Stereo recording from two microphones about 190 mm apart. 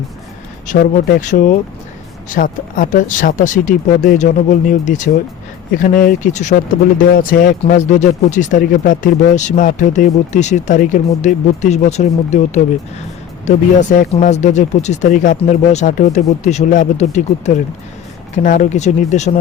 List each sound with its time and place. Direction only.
0.7 s speech: 45° left (ahead or behind)